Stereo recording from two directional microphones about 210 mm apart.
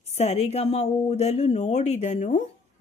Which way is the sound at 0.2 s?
30° left (ahead or behind).